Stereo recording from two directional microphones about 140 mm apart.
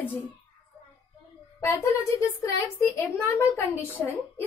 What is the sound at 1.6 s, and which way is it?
Speech, 20° left (ahead or behind).